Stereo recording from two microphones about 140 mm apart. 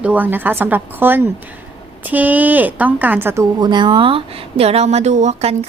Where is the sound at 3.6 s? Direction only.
35° right (ahead or behind); by 5.5 s 55° right (ahead or behind).